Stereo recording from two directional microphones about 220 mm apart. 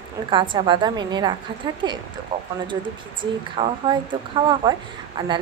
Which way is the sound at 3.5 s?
20° right (ahead or behind).